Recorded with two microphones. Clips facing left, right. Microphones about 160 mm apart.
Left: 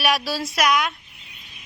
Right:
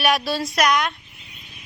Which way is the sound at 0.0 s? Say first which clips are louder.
Right 2 dB; centre (ahead or behind).